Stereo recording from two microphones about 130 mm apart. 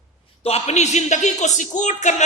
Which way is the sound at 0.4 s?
55° left (ahead or behind).